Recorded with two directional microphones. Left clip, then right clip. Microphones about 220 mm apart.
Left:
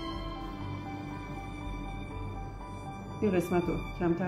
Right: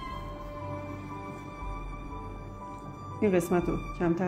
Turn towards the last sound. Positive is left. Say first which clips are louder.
# right 2 dB
turn(degrees=-55)  # may be behind; listen again after turning